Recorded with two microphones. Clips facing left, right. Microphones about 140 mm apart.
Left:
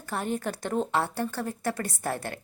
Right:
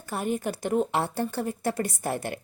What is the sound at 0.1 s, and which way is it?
A woman's voice, 10° right (ahead or behind).